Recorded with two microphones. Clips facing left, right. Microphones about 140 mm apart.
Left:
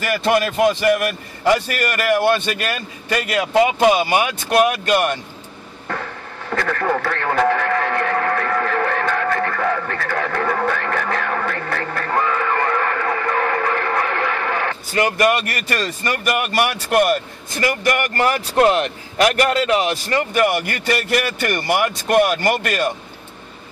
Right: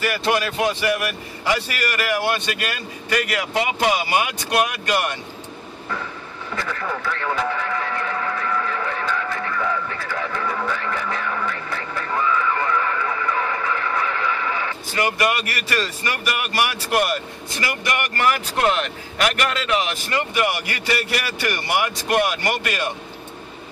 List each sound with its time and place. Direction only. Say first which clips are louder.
0.9 s speech: left 4 dB; 45° left (ahead or behind)
6.5 s radio: left 7 dB; 65° left (ahead or behind); by 22.8 s 45° left (ahead or behind)